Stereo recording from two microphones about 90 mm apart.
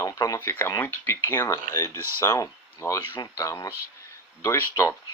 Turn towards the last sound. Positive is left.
turn(degrees=30)  # may be behind; listen again after turning